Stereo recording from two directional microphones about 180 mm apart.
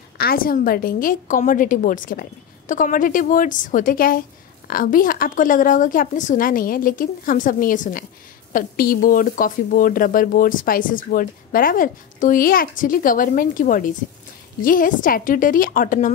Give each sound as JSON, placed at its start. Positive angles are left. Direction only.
{"t": 0.2, "sound": "speech", "side_deg": 55}